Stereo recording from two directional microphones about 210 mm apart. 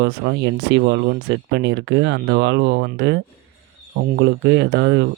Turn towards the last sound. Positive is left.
turn(degrees=-55)  # may be behind; listen again after turning